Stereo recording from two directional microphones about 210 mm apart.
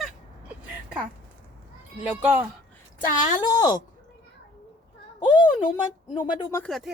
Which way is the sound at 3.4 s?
20° left (ahead or behind).